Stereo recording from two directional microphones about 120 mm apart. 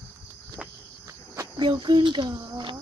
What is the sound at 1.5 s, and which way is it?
Speech, 40° right (ahead or behind).